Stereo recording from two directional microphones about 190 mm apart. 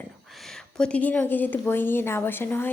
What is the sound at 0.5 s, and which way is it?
A woman's voice, 5° left (ahead or behind).